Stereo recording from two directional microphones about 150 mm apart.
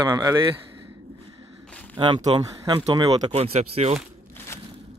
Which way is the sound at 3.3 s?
40° right (ahead or behind).